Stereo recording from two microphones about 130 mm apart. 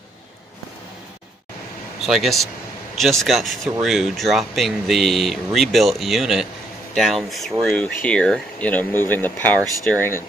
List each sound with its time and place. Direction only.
2.0 s speech: centre (ahead or behind); by 10.2 s 15° left (ahead or behind)